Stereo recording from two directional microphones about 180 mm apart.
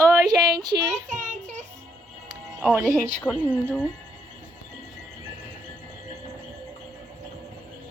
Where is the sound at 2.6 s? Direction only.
10° right (ahead or behind).